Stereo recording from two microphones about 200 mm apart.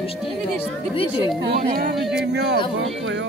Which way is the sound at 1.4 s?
50° right (ahead or behind).